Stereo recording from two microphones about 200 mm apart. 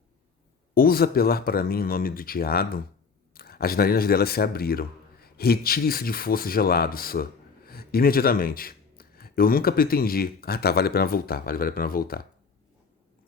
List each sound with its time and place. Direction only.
0.7 s speech: 50° left (ahead or behind)